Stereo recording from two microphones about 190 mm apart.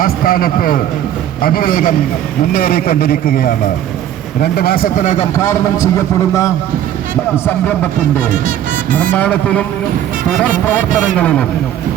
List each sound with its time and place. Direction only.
0.0 s a man's voice: 50° left (ahead or behind)
5.4 s a man's voice: 15° left (ahead or behind)
9.1 s a man's voice: 10° left (ahead or behind)
11.2 s a man's voice: 5° left (ahead or behind)